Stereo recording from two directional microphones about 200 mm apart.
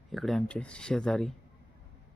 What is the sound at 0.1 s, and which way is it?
Speech, centre (ahead or behind).